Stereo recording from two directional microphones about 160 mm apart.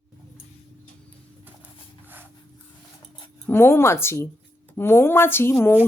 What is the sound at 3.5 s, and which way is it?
A woman's voice, 15° left (ahead or behind).